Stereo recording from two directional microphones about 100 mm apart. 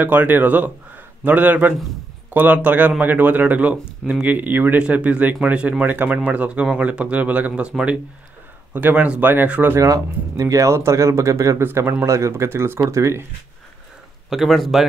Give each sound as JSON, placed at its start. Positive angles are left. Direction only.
{"t": 0.0, "sound": "speech", "side_deg": -15}
{"t": 9.8, "sound": "speech", "side_deg": -35}
{"t": 14.3, "sound": "speech", "side_deg": 0}